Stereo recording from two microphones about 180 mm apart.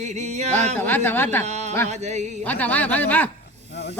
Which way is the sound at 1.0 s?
10° left (ahead or behind).